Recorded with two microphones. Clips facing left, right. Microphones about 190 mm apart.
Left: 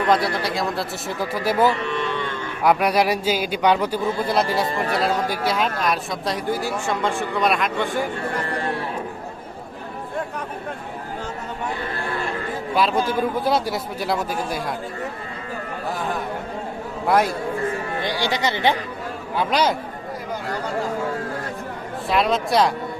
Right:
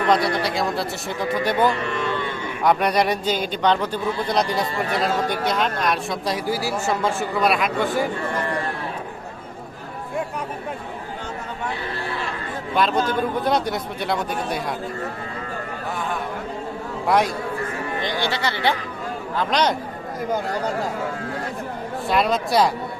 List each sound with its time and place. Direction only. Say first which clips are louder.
0.1 s a man's voice: right 1 dB; centre (ahead or behind)
12.7 s a man's voice: even; 5° left (ahead or behind)
17.1 s a man's voice: left 1 dB; centre (ahead or behind)
18.0 s speech: left 1 dB; 15° left (ahead or behind)
19.4 s speech: left 1 dB; 5° left (ahead or behind)
22.1 s a man's voice: even; centre (ahead or behind)